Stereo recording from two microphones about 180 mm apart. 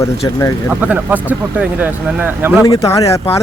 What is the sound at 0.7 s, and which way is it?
Speech, 10° right (ahead or behind).